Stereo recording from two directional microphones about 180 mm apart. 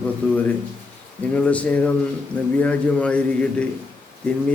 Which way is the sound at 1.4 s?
5° left (ahead or behind).